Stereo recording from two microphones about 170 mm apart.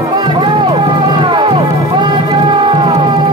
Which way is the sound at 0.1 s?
25° right (ahead or behind).